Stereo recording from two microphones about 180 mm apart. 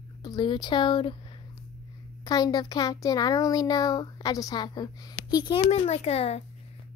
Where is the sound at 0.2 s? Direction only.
25° left (ahead or behind).